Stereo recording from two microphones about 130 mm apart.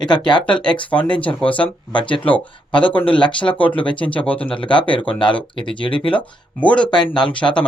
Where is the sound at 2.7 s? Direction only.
40° left (ahead or behind).